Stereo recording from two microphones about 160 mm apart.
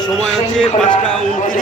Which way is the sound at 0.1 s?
5° left (ahead or behind).